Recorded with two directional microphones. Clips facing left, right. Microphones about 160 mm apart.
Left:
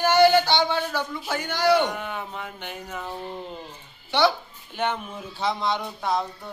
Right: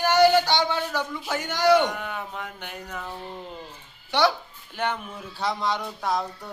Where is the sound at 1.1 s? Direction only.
Centre (ahead or behind).